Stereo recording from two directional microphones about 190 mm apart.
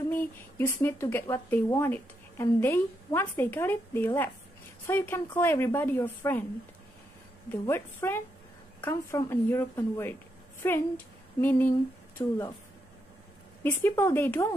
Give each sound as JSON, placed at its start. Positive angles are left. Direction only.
{"t": 0.1, "sound": "speech", "side_deg": 10}
{"t": 7.6, "sound": "speech", "side_deg": 10}
{"t": 13.6, "sound": "speech", "side_deg": 10}